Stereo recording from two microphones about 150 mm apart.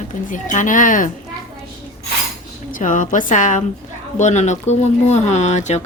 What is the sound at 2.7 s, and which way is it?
Speech, 60° left (ahead or behind).